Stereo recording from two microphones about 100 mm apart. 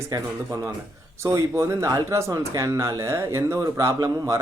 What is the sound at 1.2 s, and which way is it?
Speech, 30° right (ahead or behind).